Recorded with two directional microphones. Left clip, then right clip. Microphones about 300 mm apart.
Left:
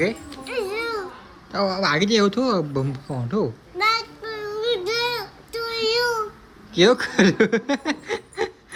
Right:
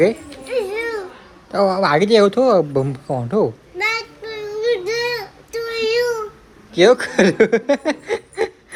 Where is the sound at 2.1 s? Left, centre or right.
Centre.